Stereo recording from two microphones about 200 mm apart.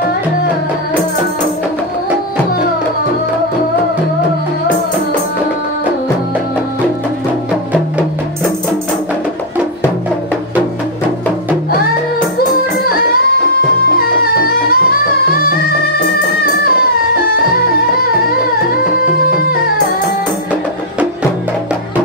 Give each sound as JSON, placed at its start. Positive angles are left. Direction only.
{"t": 13.9, "sound": "music", "side_deg": 50}